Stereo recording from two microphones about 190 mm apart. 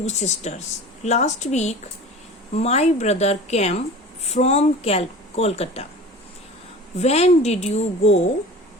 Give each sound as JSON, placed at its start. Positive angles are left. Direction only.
{"t": 0.0, "sound": "speech", "side_deg": 35}
{"t": 6.9, "sound": "speech", "side_deg": 35}